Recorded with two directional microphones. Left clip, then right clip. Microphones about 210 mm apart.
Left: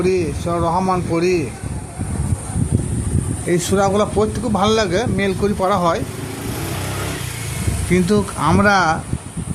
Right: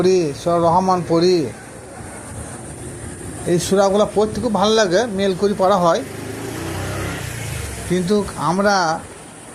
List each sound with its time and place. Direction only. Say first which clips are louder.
0.0 s speech: right 2 dB; centre (ahead or behind)
3.5 s speech: right 1 dB; centre (ahead or behind)
7.9 s speech: left 1 dB; 10° left (ahead or behind)
8.4 s speech: left 2 dB; 25° left (ahead or behind)
8.6 s speech: left 2 dB; 10° left (ahead or behind)